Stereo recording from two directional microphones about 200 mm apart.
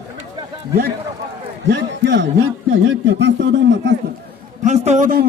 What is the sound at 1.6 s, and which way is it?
A man's voice, 60° right (ahead or behind).